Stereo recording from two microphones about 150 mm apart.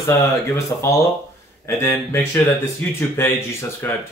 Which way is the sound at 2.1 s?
15° left (ahead or behind).